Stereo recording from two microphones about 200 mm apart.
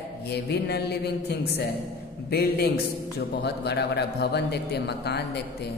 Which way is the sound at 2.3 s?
50° left (ahead or behind).